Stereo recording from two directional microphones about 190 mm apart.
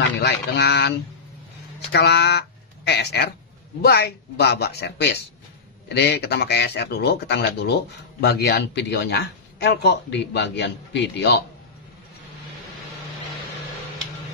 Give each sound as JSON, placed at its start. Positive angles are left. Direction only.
{"t": 0.2, "sound": "speech", "side_deg": 60}